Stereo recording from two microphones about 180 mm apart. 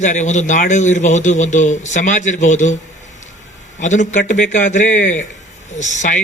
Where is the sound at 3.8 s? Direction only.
40° left (ahead or behind).